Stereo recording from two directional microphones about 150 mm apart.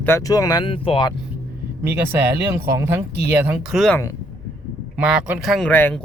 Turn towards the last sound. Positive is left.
turn(degrees=10)  # may be behind; listen again after turning